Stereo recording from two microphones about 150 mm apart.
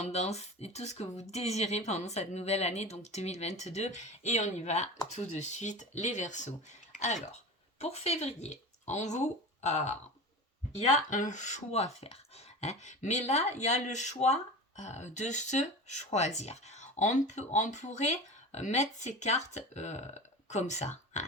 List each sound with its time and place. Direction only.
0.0 s speech: 45° left (ahead or behind)